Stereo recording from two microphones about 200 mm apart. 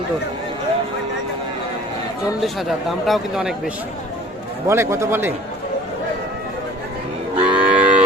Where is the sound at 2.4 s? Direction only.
Centre (ahead or behind).